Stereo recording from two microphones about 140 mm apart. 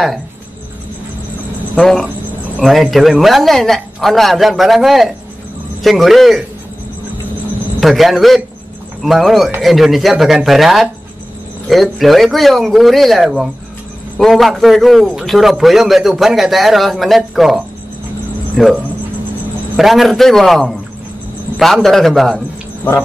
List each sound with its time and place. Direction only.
1.8 s a man's voice: 5° left (ahead or behind)
7.8 s a man's voice: centre (ahead or behind)
18.6 s a man's voice: centre (ahead or behind)
19.8 s a man's voice: centre (ahead or behind)
22.8 s insect: 15° left (ahead or behind)